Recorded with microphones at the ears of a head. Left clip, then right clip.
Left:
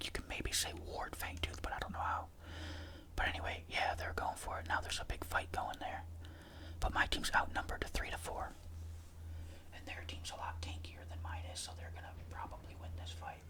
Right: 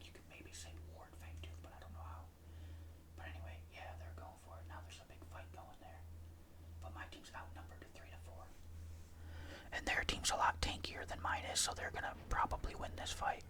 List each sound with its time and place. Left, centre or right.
0.0 s whispering: left
6.7 s speech: left
9.7 s speech: right